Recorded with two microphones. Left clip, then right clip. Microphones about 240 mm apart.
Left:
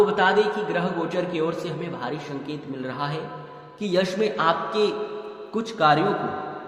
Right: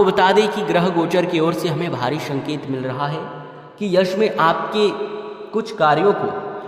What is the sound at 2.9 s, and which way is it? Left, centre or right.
A man's voice, right.